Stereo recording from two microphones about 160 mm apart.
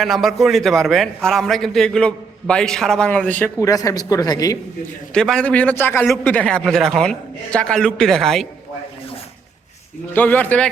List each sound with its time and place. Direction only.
0.0 s a man's voice: centre (ahead or behind)
3.7 s speech: 20° left (ahead or behind)
5.1 s a man's voice: 5° left (ahead or behind)
10.2 s speech: 10° left (ahead or behind)